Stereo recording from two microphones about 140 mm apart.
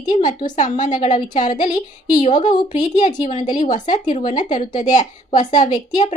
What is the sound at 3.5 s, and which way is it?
A woman's voice, 65° left (ahead or behind).